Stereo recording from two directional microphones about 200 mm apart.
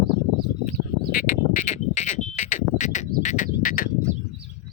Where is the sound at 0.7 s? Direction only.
45° left (ahead or behind).